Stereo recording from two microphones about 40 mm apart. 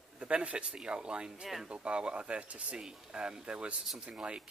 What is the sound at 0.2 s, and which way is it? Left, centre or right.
Speech, right.